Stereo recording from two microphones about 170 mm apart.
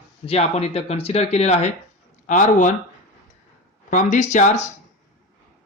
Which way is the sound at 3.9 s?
45° left (ahead or behind).